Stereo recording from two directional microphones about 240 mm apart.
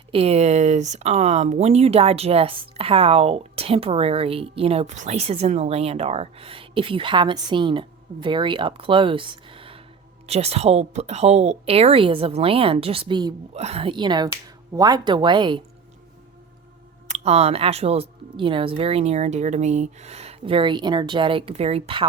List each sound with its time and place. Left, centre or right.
0.1 s speech: right
17.1 s speech: right